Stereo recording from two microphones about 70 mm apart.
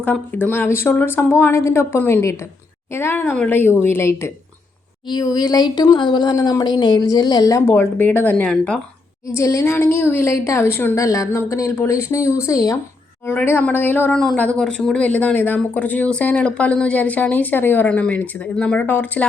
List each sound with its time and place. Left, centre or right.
0.5 s a woman's voice: left
5.0 s speech: left
7.9 s speech: left
8.4 s speech: centre
9.2 s speech: left
9.6 s a woman's voice: left
10.2 s a woman's voice: left
10.9 s speech: left
12.5 s speech: left
13.2 s a woman's voice: left
14.1 s speech: centre